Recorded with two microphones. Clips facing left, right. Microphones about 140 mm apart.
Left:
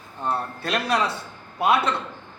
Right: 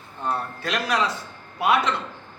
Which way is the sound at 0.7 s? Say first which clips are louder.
Left 1 dB; 25° left (ahead or behind).